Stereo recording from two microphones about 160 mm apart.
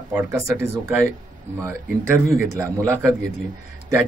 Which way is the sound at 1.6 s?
15° right (ahead or behind).